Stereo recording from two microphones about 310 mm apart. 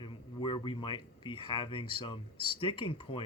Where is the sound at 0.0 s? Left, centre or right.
Centre.